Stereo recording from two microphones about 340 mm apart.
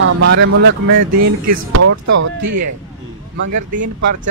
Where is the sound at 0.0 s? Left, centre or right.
Right.